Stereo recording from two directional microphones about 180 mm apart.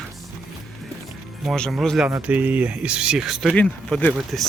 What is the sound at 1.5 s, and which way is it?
A man's voice, centre (ahead or behind).